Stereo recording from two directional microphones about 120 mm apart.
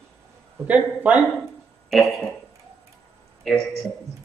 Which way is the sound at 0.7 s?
10° right (ahead or behind).